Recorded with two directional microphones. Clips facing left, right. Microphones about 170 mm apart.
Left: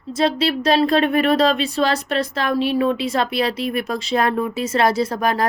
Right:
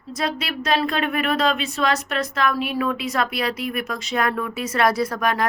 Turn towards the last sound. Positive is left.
turn(degrees=35)  # may be behind; listen again after turning